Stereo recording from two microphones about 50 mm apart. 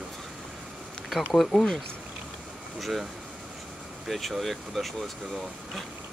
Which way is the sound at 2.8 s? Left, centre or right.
Centre.